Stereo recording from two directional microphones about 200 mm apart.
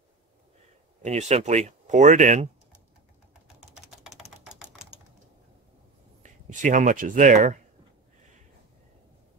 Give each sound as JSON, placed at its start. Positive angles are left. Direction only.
{"t": 1.0, "sound": "speech", "side_deg": -35}
{"t": 3.6, "sound": "typing", "side_deg": 0}
{"t": 4.2, "sound": "typewriter", "side_deg": -5}
{"t": 6.2, "sound": "speech", "side_deg": -40}